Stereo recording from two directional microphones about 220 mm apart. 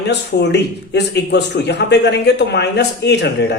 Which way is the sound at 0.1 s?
50° left (ahead or behind).